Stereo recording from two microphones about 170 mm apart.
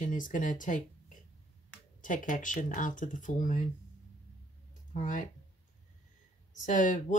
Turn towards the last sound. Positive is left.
turn(degrees=50)  # may be behind; listen again after turning